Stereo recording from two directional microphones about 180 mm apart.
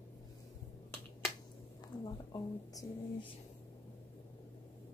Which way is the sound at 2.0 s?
20° left (ahead or behind).